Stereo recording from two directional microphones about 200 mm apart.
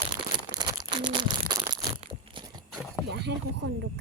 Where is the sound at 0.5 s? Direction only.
20° right (ahead or behind).